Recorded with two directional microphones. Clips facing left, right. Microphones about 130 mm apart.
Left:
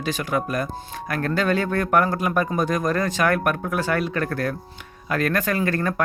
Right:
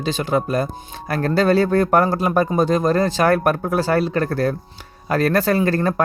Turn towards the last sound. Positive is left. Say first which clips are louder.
# right 5 dB
turn(degrees=-30)  # may be behind; listen again after turning